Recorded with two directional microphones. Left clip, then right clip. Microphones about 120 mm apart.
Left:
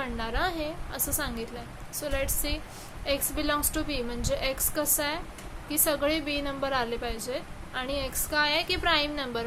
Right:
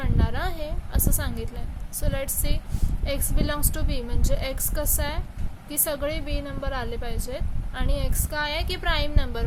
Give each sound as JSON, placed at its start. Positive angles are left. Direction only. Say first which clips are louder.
{"t": 0.0, "sound": "a woman's voice", "louder": "left 1 dB", "side_deg": -40}